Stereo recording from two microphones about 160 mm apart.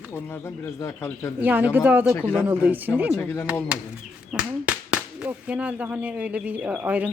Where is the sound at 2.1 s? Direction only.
10° left (ahead or behind).